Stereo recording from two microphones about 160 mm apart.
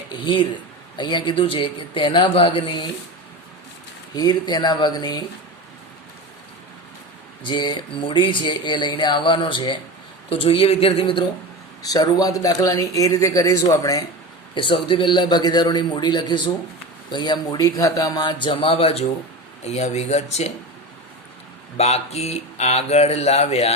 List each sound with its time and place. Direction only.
0.1 s speech: 30° left (ahead or behind)
4.1 s speech: 25° left (ahead or behind)
7.4 s speech: 30° left (ahead or behind)
14.5 s speech: 30° left (ahead or behind)
21.8 s speech: 40° left (ahead or behind)